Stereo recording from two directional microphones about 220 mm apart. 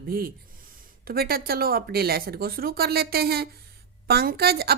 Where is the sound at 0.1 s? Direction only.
40° right (ahead or behind).